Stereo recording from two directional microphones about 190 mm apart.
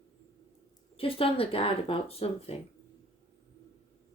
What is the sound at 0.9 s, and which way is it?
Speech, 30° left (ahead or behind).